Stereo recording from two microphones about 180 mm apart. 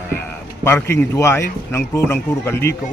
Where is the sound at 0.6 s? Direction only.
10° left (ahead or behind).